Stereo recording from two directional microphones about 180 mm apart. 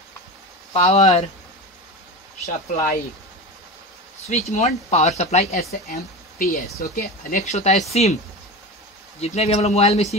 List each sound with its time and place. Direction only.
0.7 s speech: 35° left (ahead or behind)
2.4 s speech: 45° left (ahead or behind)
4.3 s speech: 40° left (ahead or behind)
5.6 s speech: 55° left (ahead or behind); by 8.2 s 35° left (ahead or behind)
9.2 s speech: 35° left (ahead or behind)